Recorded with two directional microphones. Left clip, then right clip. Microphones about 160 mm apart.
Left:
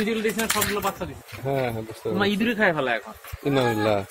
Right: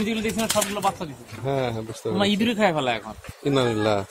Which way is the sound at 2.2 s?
70° right (ahead or behind).